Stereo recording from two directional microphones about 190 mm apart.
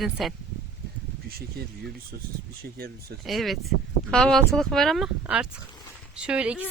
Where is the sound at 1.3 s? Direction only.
55° right (ahead or behind).